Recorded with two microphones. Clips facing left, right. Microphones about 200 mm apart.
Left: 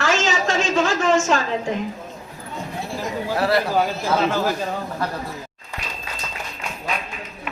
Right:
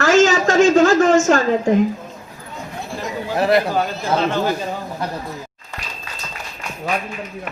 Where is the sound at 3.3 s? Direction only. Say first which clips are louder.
Right 4 dB; 20° right (ahead or behind).